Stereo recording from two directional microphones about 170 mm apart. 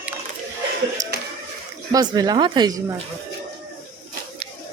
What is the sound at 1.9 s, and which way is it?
Speech, 20° right (ahead or behind).